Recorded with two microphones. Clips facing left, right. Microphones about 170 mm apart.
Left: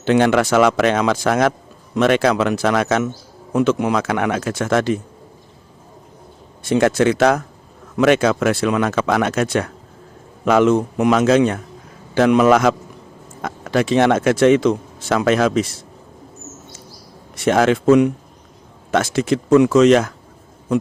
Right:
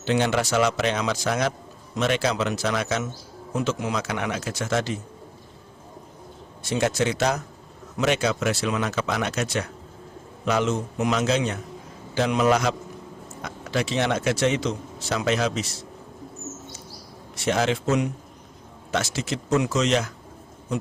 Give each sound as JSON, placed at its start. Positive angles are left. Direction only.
{"t": 0.0, "sound": "speech", "side_deg": 55}
{"t": 6.6, "sound": "speech", "side_deg": 55}
{"t": 17.3, "sound": "speech", "side_deg": 50}